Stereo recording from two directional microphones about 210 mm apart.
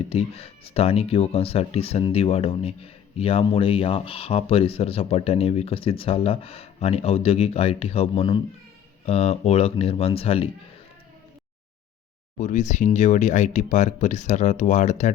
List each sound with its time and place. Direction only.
0.1 s speech: 30° left (ahead or behind)
12.4 s speech: 35° left (ahead or behind)